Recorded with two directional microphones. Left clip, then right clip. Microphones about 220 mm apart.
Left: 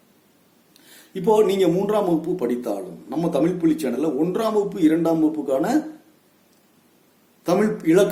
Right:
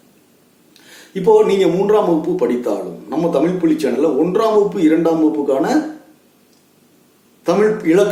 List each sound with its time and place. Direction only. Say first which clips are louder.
1.1 s a man's voice: right 6 dB; 50° left (ahead or behind)
7.4 s a man's voice: right 6 dB; 50° left (ahead or behind)